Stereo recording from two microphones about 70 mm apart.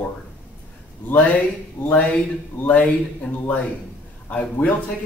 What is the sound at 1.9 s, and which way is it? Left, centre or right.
Speech, centre.